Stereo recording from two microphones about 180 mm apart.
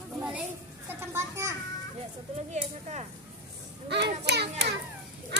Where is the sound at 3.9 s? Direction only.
70° right (ahead or behind).